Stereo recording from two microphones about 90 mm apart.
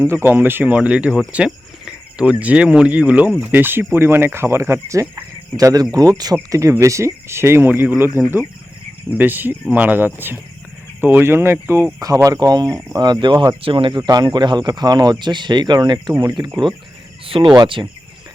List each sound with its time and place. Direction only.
0.0 s speech: 25° right (ahead or behind)
5.5 s speech: 45° right (ahead or behind); by 11.9 s 30° right (ahead or behind)
11.9 s speech: 40° right (ahead or behind); by 13.3 s 55° right (ahead or behind)
13.3 s speech: 40° right (ahead or behind)
13.6 s speech: 80° right
14.1 s speech: 50° right (ahead or behind)
17.4 s speech: 50° right (ahead or behind)